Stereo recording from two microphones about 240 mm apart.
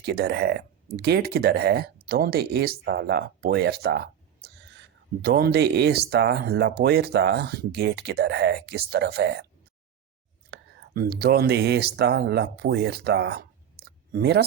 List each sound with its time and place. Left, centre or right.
0.0 s speech: right
10.5 s speech: right